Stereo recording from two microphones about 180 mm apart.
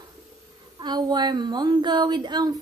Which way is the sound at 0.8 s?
25° right (ahead or behind).